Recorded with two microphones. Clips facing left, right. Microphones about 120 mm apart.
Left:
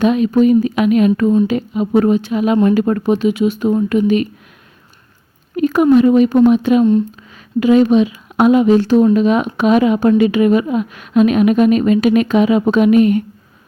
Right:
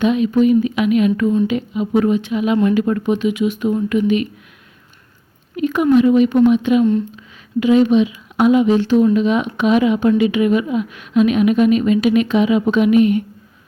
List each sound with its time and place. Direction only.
0.0 s speech: 40° left (ahead or behind)
5.5 s a woman's voice: 40° left (ahead or behind)